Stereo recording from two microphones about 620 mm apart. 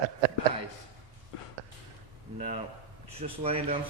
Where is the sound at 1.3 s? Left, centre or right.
Left.